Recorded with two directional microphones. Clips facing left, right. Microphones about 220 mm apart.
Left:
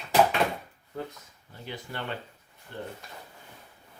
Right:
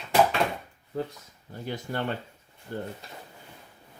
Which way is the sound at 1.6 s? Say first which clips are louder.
Right 6 dB; 45° right (ahead or behind).